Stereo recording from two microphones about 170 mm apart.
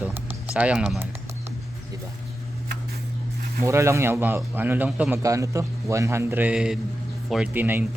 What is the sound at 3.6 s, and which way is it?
A man's voice, 15° right (ahead or behind).